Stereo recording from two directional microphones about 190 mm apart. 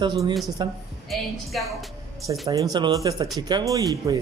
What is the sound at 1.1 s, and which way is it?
Speech, centre (ahead or behind).